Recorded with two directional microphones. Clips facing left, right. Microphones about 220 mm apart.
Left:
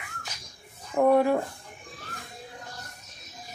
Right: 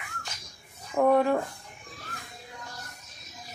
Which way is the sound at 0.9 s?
10° left (ahead or behind).